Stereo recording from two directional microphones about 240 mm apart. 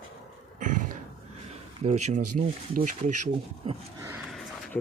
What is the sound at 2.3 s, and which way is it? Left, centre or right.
Speech, right.